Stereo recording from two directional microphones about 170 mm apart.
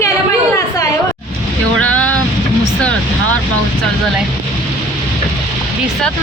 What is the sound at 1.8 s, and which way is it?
Boat, 10° left (ahead or behind).